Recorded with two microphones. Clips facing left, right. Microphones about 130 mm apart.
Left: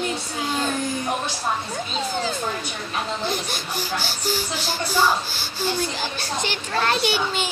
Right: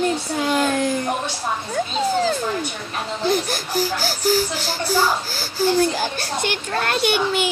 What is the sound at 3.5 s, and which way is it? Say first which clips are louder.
Speech: right 5 dB; 40° right (ahead or behind).